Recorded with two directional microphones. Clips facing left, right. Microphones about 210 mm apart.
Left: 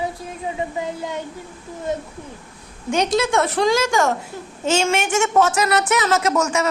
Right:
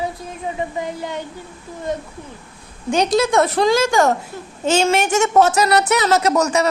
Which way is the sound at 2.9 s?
35° right (ahead or behind).